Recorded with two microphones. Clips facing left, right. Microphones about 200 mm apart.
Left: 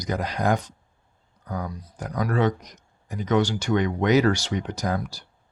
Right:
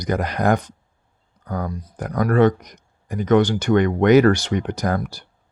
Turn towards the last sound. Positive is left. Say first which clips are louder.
# right 4 dB
turn(degrees=-55)  # may be behind; listen again after turning